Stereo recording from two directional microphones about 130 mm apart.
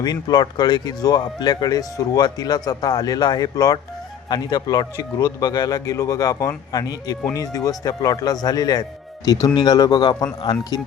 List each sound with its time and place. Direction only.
0.0 s speech: 30° left (ahead or behind)